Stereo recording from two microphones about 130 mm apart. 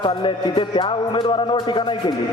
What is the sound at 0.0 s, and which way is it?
A man's voice, 40° left (ahead or behind).